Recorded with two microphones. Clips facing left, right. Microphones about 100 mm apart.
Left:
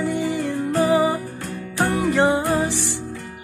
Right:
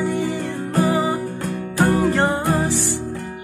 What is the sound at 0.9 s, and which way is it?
Music, 30° right (ahead or behind).